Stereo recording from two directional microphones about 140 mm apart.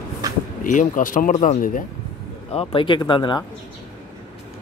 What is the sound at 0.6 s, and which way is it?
Speech, 70° left (ahead or behind).